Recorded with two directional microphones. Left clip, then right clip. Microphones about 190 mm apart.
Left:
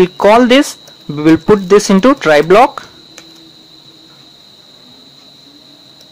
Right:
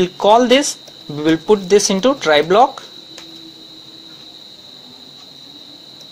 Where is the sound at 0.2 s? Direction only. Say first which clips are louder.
Left 3 dB; 35° left (ahead or behind).